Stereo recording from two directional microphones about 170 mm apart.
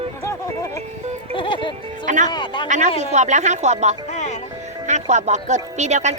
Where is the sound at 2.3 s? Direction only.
25° left (ahead or behind).